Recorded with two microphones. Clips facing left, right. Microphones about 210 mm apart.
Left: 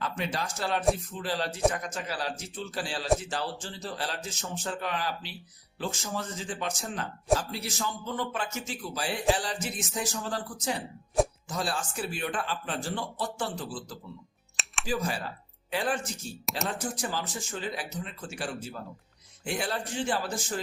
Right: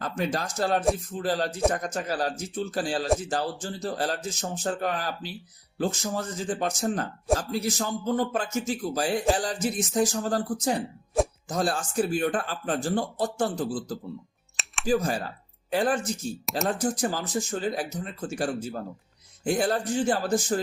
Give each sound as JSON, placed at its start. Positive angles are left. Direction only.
{"t": 0.0, "sound": "speech", "side_deg": -45}
{"t": 11.4, "sound": "speech", "side_deg": -45}
{"t": 14.5, "sound": "music", "side_deg": 0}
{"t": 14.8, "sound": "speech", "side_deg": -45}